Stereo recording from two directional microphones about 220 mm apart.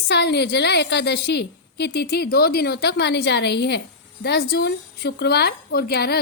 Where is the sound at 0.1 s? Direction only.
50° left (ahead or behind).